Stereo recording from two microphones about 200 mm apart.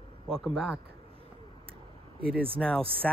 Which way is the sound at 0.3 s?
Centre (ahead or behind).